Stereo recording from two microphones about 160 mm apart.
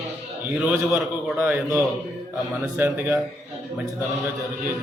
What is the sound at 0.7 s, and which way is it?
A man's voice, 10° right (ahead or behind).